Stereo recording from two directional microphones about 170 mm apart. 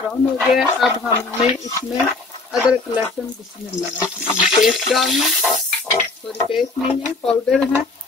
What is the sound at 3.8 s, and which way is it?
Stir, centre (ahead or behind).